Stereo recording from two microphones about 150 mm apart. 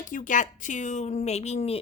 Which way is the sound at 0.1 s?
60° left (ahead or behind).